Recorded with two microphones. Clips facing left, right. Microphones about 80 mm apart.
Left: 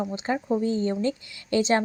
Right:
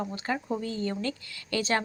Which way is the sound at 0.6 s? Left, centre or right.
Left.